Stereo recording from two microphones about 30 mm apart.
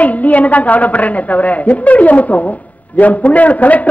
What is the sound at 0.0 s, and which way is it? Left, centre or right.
A woman's voice, left.